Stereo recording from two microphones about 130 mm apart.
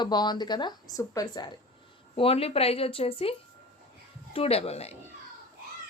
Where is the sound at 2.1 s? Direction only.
50° left (ahead or behind).